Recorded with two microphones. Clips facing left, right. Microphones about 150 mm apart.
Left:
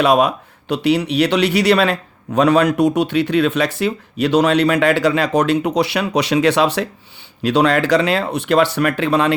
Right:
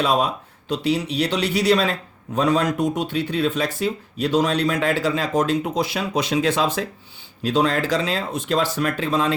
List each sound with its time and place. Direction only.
0.0 s speech: 70° left (ahead or behind)